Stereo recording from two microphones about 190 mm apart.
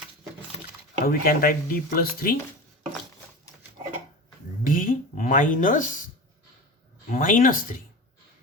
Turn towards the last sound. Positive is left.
turn(degrees=45)  # may be behind; listen again after turning